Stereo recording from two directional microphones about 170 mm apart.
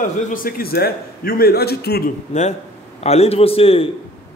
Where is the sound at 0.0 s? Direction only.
55° left (ahead or behind); by 2.0 s 70° left (ahead or behind).